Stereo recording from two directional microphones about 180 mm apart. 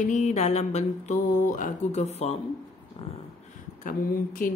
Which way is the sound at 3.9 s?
50° left (ahead or behind).